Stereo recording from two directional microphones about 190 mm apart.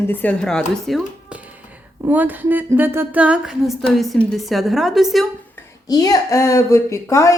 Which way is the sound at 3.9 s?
Centre (ahead or behind).